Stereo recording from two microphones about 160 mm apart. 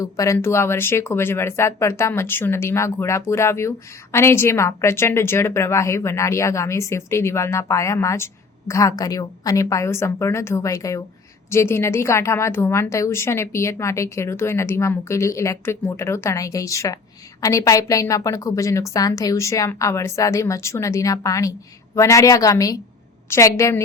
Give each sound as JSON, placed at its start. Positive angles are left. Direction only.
{"t": 0.0, "sound": "a woman's voice", "side_deg": 20}